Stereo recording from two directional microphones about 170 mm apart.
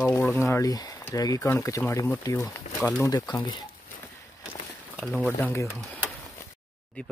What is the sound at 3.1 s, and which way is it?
Speech, 20° left (ahead or behind).